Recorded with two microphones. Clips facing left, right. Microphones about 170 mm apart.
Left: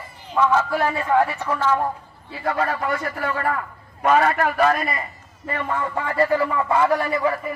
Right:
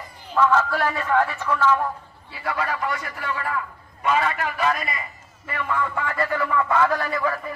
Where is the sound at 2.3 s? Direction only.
45° left (ahead or behind).